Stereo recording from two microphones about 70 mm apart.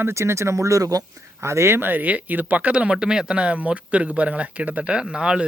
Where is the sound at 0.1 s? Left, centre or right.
Right.